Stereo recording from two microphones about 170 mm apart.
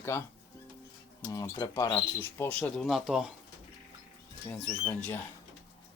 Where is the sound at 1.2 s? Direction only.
20° left (ahead or behind); by 3.2 s centre (ahead or behind).